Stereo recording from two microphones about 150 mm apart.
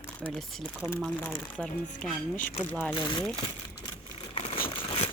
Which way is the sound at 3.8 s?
40° left (ahead or behind).